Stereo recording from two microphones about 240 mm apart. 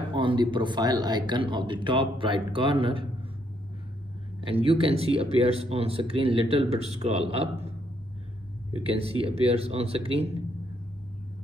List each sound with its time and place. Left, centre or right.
0.1 s speech: centre
4.5 s speech: right
8.7 s speech: right